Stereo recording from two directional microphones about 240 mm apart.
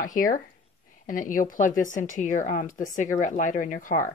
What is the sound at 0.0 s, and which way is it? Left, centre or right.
Speech, left.